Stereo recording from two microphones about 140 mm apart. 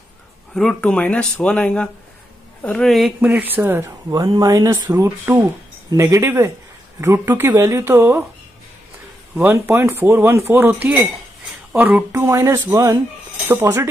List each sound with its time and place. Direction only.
0.6 s speech: 5° left (ahead or behind)
3.2 s speech: 10° right (ahead or behind)
9.3 s speech: 15° right (ahead or behind)